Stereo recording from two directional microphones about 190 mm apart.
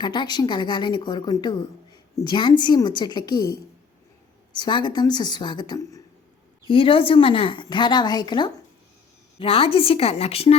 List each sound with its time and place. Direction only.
0.0 s speech: 25° left (ahead or behind)